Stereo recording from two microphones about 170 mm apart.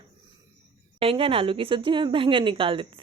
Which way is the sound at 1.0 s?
35° right (ahead or behind).